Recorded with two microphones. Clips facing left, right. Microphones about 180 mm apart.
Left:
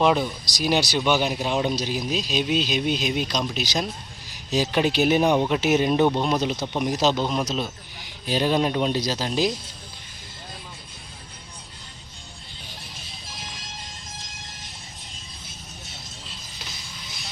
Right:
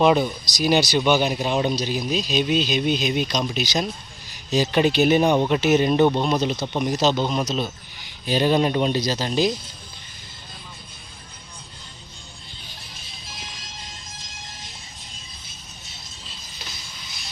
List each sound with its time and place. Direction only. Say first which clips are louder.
0.0 s speech: right 3 dB; 5° right (ahead or behind)